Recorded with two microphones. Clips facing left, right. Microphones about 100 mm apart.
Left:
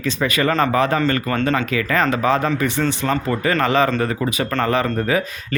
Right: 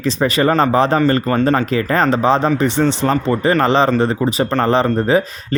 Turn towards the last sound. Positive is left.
turn(degrees=-30)  # may be behind; listen again after turning